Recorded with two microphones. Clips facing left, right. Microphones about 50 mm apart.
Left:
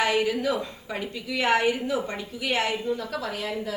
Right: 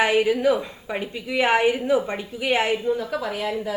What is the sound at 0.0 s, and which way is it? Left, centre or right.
A woman's voice, right.